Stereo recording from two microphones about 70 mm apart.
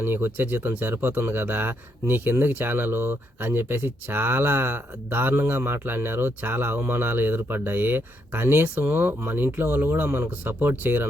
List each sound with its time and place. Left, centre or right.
0.0 s speech: right